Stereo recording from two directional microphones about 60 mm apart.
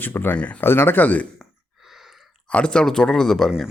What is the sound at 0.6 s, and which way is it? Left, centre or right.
Speech, left.